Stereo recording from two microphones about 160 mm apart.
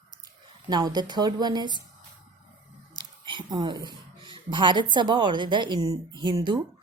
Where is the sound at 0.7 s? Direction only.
25° right (ahead or behind).